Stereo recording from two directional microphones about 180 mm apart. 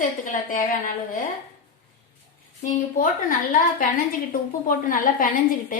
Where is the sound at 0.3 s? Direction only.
45° left (ahead or behind).